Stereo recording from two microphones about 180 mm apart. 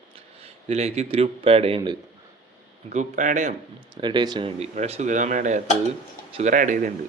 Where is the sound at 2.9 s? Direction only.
45° right (ahead or behind).